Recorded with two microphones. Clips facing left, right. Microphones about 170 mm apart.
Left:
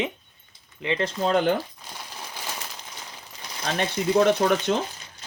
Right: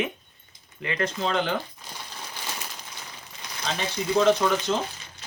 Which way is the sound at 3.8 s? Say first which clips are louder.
Left 3 dB; 60° left (ahead or behind).